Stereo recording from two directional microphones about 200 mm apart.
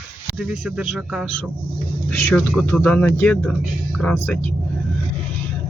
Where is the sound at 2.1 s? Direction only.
10° left (ahead or behind).